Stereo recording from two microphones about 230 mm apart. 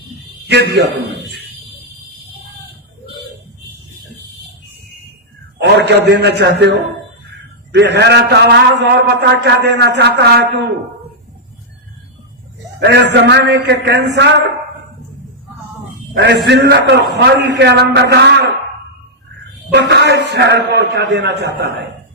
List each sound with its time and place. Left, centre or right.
0.4 s a man's voice: right
5.5 s a man's voice: right
13.1 s a man's voice: right
16.1 s a man's voice: right
19.7 s a man's voice: right